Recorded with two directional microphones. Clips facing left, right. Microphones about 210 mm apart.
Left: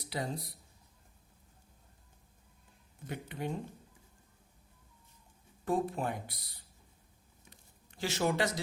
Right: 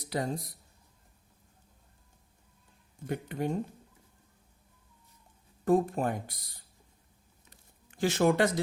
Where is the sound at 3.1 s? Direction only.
45° right (ahead or behind).